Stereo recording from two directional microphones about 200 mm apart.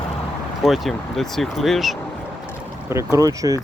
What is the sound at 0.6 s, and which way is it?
Speech, centre (ahead or behind).